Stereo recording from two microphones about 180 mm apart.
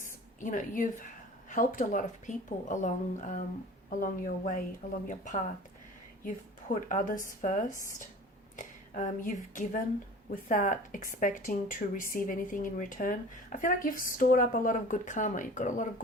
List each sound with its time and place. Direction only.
0.0 s a sound: 45° left (ahead or behind)
1.5 s speech: 45° left (ahead or behind)
6.8 s speech: 45° left (ahead or behind)